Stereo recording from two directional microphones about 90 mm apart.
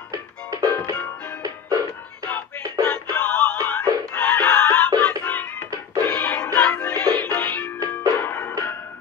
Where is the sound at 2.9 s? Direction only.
10° left (ahead or behind).